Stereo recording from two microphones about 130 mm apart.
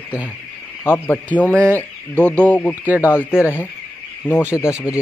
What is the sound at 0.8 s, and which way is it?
Speech, 15° left (ahead or behind).